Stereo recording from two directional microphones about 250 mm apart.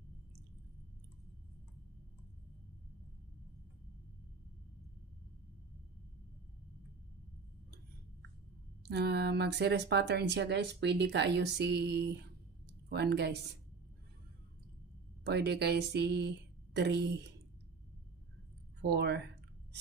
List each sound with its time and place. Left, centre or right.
8.8 s speech: right
12.6 s a sound: right
15.2 s speech: right
18.8 s speech: right